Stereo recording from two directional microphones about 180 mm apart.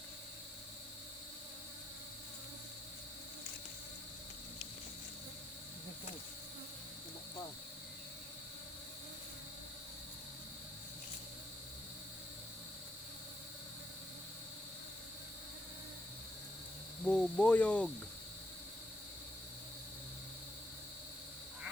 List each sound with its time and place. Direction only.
17.1 s cricket: 5° left (ahead or behind)